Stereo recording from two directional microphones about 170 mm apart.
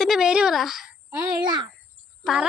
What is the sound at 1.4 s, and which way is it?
Speech, 25° right (ahead or behind).